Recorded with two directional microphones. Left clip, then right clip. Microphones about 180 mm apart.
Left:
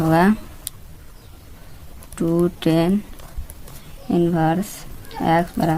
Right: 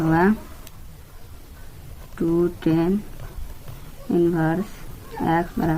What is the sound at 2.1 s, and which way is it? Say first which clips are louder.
Speech: left 1 dB; 50° left (ahead or behind).